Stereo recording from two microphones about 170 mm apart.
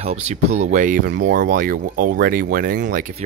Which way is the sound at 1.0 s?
90° right.